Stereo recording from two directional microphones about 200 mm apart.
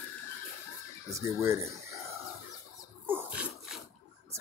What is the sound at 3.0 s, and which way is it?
Dog, 10° right (ahead or behind).